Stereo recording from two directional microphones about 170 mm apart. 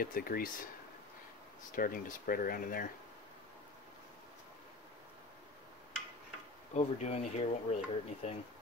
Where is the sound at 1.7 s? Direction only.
55° left (ahead or behind).